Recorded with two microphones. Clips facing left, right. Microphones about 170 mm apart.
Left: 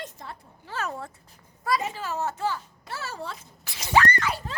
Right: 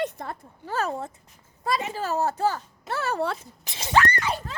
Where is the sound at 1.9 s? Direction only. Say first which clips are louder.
Right 5 dB; 40° right (ahead or behind).